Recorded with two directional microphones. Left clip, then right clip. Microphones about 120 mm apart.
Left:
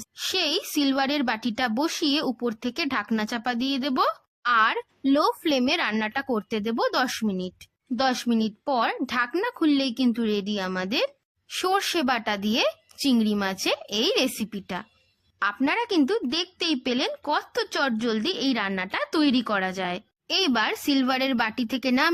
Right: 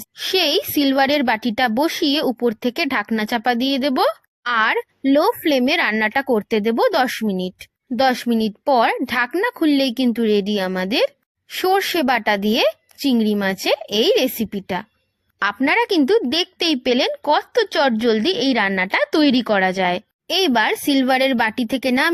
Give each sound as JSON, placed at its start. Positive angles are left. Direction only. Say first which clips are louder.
{"t": 0.2, "sound": "speech", "louder": "right 8 dB", "side_deg": -45}
{"t": 7.9, "sound": "a woman's voice", "louder": "right 7 dB", "side_deg": -35}
{"t": 11.4, "sound": "speech", "louder": "right 6 dB", "side_deg": -30}
{"t": 15.4, "sound": "a woman's voice", "louder": "right 7 dB", "side_deg": -45}
{"t": 20.2, "sound": "speech", "louder": "right 6 dB", "side_deg": -35}